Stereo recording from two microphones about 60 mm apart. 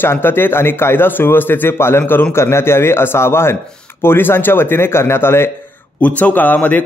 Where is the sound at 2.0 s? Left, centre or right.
Left.